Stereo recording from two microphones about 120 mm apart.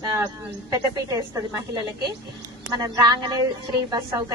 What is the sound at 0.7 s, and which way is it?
A woman's voice, 30° right (ahead or behind).